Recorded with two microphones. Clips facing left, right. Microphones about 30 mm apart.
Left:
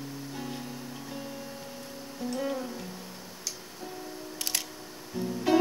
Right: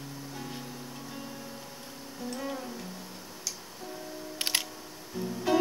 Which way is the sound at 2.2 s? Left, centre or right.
Centre.